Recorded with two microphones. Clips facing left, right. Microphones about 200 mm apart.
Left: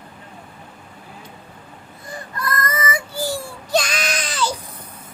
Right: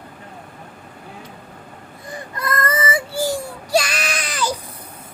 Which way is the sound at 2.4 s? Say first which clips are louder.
Right 3 dB; 25° right (ahead or behind).